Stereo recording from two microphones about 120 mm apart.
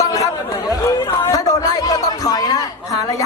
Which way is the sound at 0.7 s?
30° left (ahead or behind).